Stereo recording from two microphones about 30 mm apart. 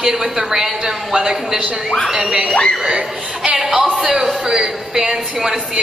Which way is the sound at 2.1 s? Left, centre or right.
Right.